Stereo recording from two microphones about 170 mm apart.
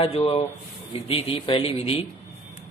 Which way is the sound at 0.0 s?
35° left (ahead or behind).